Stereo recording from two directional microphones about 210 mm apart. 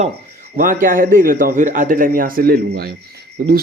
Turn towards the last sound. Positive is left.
turn(degrees=-45)  # may be behind; listen again after turning